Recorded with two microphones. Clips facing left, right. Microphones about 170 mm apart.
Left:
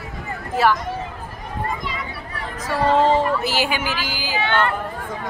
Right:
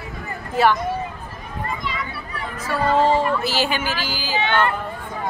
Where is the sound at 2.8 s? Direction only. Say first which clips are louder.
Left 1 dB; 20° left (ahead or behind).